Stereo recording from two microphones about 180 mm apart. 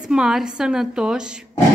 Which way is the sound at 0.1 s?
5° right (ahead or behind).